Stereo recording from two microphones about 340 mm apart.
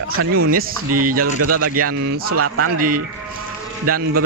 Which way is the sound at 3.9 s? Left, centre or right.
Right.